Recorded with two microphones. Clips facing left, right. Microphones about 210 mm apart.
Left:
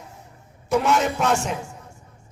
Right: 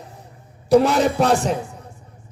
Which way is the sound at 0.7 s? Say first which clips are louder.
Right 6 dB; 35° right (ahead or behind).